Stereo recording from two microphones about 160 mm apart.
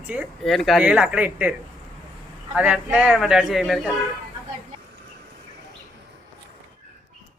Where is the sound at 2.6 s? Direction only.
5° right (ahead or behind).